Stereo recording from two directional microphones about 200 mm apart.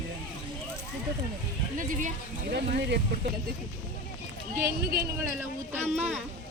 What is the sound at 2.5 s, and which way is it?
Speech, 55° right (ahead or behind).